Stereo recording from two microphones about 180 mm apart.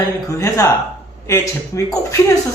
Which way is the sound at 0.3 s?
15° left (ahead or behind).